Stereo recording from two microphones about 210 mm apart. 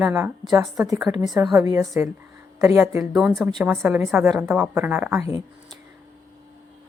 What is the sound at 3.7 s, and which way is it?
A woman's voice, 10° right (ahead or behind).